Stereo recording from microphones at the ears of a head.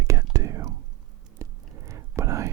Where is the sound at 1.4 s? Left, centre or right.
Right.